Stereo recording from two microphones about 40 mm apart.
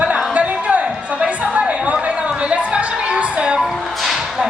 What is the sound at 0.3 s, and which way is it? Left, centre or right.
Music, right.